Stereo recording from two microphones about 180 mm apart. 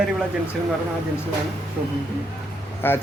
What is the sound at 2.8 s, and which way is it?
Speech, 10° left (ahead or behind).